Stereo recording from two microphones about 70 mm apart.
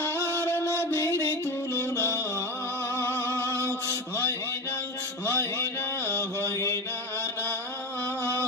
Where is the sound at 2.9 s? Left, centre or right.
Left.